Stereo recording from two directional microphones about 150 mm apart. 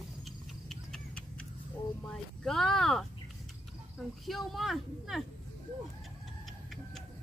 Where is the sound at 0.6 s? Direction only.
5° left (ahead or behind).